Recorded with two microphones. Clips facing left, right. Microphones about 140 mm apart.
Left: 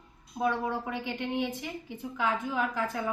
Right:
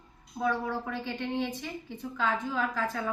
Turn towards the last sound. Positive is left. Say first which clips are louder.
# even
turn(degrees=15)  # may be behind; listen again after turning